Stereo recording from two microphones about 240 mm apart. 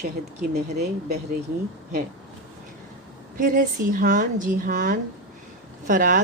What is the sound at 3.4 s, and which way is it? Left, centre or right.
A woman's voice, right.